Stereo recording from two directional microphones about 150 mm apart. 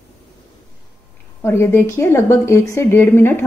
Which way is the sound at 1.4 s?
15° left (ahead or behind).